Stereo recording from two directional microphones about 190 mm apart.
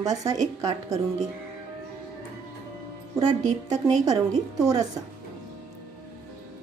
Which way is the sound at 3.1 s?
20° right (ahead or behind).